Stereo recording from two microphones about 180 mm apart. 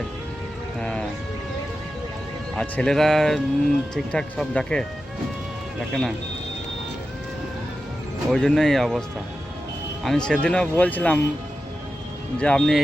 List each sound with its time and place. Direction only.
0.8 s speech: 5° left (ahead or behind)
2.6 s speech: 5° left (ahead or behind)
8.3 s speech: 5° left (ahead or behind)
12.4 s speech: 5° left (ahead or behind)